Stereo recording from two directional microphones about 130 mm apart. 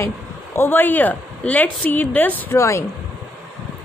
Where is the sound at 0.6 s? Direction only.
15° left (ahead or behind).